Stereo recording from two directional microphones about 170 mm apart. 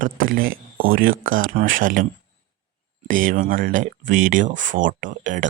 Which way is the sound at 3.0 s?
50° right (ahead or behind).